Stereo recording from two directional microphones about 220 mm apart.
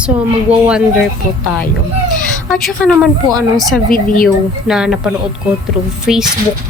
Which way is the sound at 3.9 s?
40° left (ahead or behind).